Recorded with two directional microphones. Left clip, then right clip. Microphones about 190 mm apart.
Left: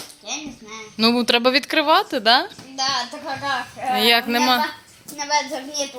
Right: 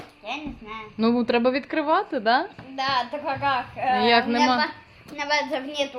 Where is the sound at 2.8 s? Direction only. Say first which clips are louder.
Left 1 dB; 25° right (ahead or behind).